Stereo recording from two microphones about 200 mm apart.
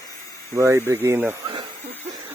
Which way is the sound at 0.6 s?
15° right (ahead or behind).